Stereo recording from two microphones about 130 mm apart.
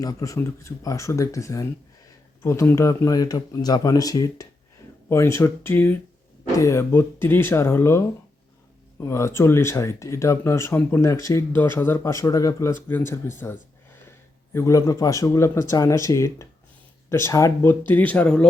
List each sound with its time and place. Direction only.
0.0 s speech: 25° left (ahead or behind); by 18.4 s 10° left (ahead or behind)